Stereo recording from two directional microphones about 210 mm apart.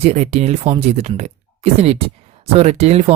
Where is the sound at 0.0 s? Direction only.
30° right (ahead or behind).